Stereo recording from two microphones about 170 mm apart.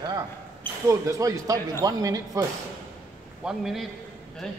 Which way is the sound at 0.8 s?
20° right (ahead or behind).